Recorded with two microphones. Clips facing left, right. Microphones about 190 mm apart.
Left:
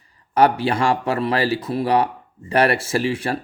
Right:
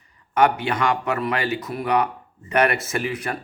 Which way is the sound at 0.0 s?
35° left (ahead or behind).